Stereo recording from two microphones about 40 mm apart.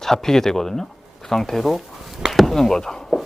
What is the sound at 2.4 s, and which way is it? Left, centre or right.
Speech, centre.